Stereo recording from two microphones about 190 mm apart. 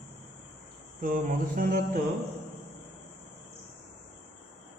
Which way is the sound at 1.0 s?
45° right (ahead or behind).